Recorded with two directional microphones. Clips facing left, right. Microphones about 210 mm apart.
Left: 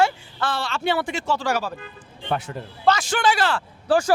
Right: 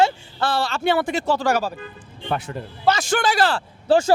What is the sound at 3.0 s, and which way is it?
Speech, 40° right (ahead or behind).